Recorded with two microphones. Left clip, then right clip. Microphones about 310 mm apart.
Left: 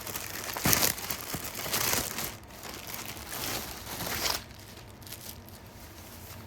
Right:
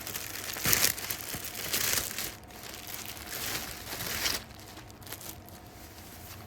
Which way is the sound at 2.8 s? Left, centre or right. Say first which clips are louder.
Left 2 dB; centre.